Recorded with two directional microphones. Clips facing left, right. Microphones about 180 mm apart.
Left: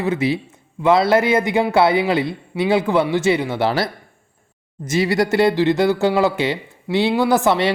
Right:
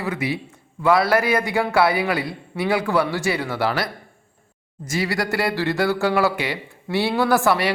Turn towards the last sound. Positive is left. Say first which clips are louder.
# left 2 dB
turn(degrees=20)  # may be behind; listen again after turning